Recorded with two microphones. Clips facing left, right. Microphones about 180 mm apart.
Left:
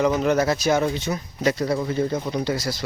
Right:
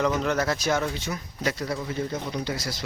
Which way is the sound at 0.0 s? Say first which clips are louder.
Left 5 dB; 10° left (ahead or behind).